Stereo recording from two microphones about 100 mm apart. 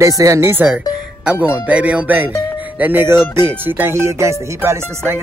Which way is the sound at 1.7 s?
10° right (ahead or behind).